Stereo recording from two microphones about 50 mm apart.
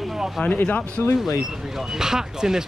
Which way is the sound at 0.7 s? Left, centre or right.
Left.